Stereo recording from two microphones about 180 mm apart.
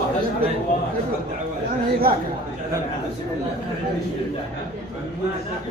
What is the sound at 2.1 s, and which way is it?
Speech, 55° right (ahead or behind).